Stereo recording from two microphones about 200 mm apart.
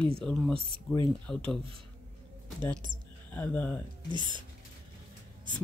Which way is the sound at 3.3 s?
10° left (ahead or behind).